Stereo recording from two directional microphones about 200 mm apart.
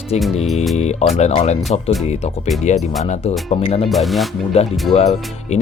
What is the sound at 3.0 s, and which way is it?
Speech, 35° left (ahead or behind).